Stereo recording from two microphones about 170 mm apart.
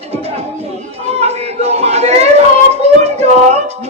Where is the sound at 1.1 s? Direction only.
40° right (ahead or behind).